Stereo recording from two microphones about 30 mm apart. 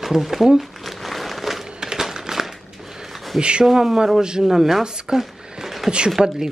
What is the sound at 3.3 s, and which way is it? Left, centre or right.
Speech, right.